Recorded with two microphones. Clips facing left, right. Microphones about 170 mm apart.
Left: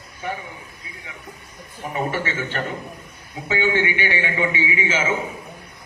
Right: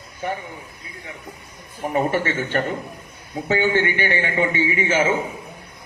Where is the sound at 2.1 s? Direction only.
50° right (ahead or behind).